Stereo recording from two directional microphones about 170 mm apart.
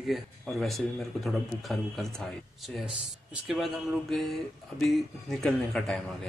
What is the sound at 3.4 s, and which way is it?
Speech, centre (ahead or behind).